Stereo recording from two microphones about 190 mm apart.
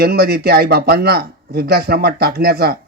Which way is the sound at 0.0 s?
55° right (ahead or behind).